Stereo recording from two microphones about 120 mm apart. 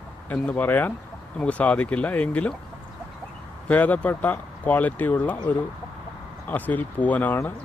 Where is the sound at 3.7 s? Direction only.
15° left (ahead or behind).